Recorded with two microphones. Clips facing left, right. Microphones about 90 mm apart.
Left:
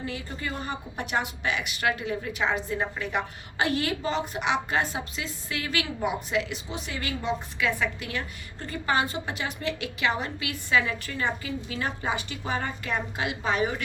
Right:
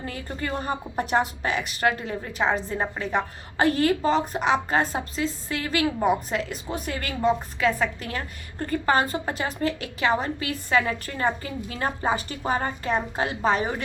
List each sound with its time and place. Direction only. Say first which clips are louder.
0.0 s a woman's voice: right 2 dB; 45° right (ahead or behind)